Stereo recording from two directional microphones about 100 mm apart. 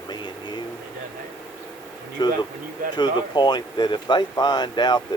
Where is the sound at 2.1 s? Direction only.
45° left (ahead or behind).